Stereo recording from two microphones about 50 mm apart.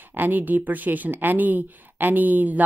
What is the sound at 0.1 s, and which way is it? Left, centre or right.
Speech, right.